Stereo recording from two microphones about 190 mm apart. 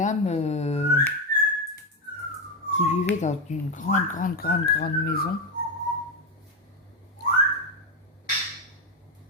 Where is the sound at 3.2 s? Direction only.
40° left (ahead or behind); by 5.2 s 55° left (ahead or behind).